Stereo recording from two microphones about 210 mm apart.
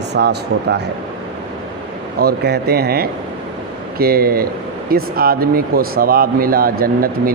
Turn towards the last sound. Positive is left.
turn(degrees=-45)  # may be behind; listen again after turning